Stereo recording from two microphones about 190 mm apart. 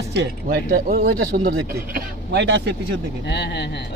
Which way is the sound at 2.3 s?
65° right (ahead or behind).